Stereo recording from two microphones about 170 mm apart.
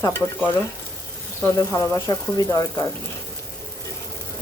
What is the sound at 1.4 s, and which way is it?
Speech, 20° left (ahead or behind).